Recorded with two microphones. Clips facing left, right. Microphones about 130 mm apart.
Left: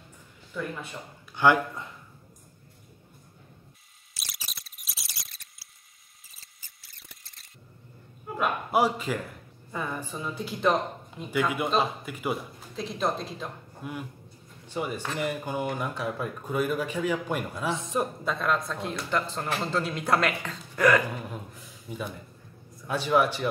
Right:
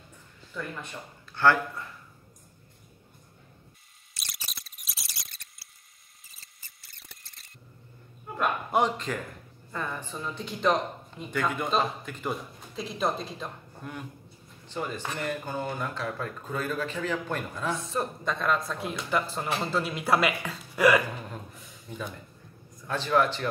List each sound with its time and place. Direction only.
0.5 s speech: 10° left (ahead or behind)
4.1 s a sound: centre (ahead or behind)
6.2 s mouse: centre (ahead or behind)
8.4 s a man's voice: 5° left (ahead or behind)
18.2 s a man's voice: centre (ahead or behind)
21.5 s a sound: centre (ahead or behind)
22.8 s speech: 10° left (ahead or behind)